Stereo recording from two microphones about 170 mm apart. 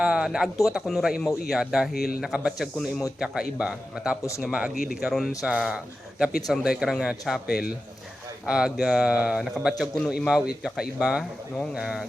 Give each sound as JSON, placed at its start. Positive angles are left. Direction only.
{"t": 0.0, "sound": "speech", "side_deg": -5}